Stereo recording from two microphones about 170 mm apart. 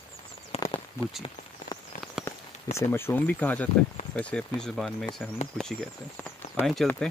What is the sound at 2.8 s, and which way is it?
Speech, 15° left (ahead or behind).